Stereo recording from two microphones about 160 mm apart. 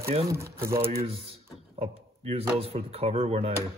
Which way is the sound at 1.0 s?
35° right (ahead or behind).